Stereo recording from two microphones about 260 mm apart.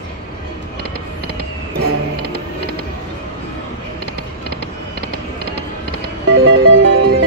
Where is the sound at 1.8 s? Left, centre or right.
Right.